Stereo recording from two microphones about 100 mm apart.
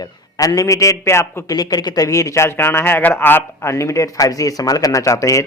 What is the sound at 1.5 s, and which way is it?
Speech, 40° left (ahead or behind).